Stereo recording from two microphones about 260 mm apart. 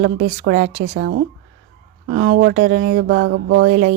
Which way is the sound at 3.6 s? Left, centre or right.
Right.